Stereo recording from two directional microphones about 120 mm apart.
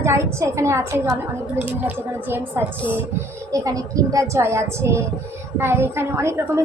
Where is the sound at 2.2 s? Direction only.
15° right (ahead or behind).